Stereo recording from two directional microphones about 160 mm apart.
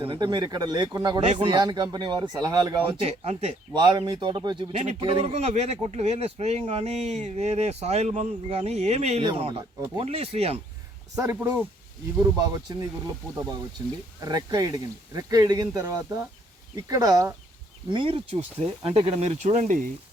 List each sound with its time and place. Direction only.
0.0 s speech: 30° right (ahead or behind)
3.0 s speech: 40° right (ahead or behind)
3.8 s speech: 25° right (ahead or behind)
9.2 s speech: 30° right (ahead or behind)
11.1 s speech: 15° right (ahead or behind)
12.2 s speech: 20° right (ahead or behind)
14.2 s speech: 25° right (ahead or behind)
17.9 s speech: 35° right (ahead or behind); by 19.9 s 50° right (ahead or behind)